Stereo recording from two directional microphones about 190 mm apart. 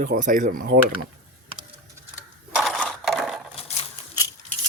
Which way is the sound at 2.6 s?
Centre (ahead or behind).